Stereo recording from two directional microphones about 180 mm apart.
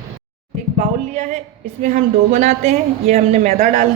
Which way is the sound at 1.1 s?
40° right (ahead or behind).